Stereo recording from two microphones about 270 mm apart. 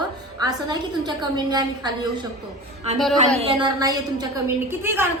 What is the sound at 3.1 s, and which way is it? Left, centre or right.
A woman's voice, right.